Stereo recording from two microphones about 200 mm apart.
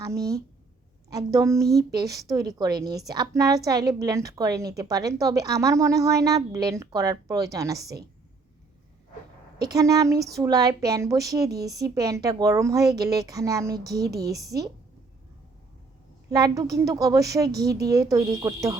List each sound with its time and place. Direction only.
0.0 s a woman's voice: 15° right (ahead or behind)
9.6 s a woman's voice: 15° right (ahead or behind)
16.3 s a woman's voice: 20° right (ahead or behind)